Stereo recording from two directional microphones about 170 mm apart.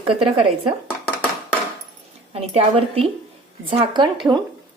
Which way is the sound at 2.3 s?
35° right (ahead or behind).